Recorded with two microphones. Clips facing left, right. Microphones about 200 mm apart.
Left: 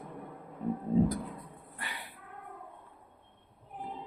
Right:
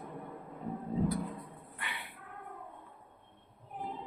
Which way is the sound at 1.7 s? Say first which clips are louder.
Left 1 dB; 40° left (ahead or behind).